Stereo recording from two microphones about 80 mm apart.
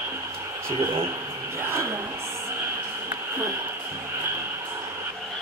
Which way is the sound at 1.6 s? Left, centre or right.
Right.